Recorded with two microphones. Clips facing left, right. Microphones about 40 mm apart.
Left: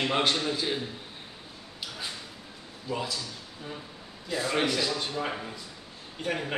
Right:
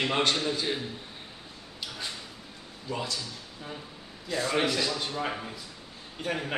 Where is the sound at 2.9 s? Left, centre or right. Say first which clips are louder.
Left 1 dB; centre.